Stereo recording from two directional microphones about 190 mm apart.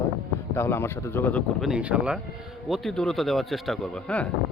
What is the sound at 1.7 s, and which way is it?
Speech, 5° right (ahead or behind).